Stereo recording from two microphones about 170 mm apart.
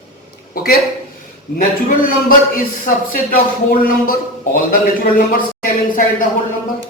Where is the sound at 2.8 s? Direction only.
55° left (ahead or behind).